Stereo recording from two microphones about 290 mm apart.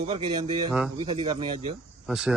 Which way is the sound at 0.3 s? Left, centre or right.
Centre.